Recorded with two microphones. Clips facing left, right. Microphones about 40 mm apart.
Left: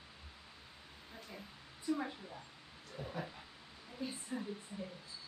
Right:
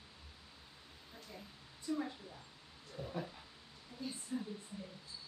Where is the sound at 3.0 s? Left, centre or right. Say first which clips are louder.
Even; left.